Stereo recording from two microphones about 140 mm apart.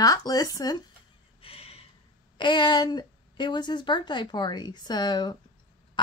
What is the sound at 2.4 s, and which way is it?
A woman's voice, 35° left (ahead or behind).